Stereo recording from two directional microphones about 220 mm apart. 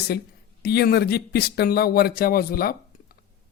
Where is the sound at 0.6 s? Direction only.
45° left (ahead or behind).